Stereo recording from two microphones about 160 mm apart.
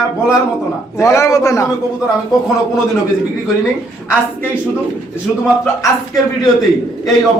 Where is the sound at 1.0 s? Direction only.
20° left (ahead or behind).